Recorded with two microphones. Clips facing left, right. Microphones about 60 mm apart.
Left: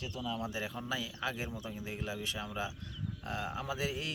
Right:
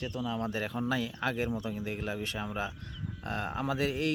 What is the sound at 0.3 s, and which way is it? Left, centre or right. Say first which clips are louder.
Speech: right 2 dB; right.